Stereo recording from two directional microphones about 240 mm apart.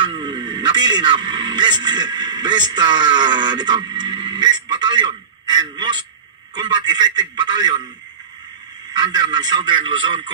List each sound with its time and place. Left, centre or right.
0.0 s speech: centre
3.9 s radio: centre
6.5 s a man's voice: centre
8.9 s a man's voice: centre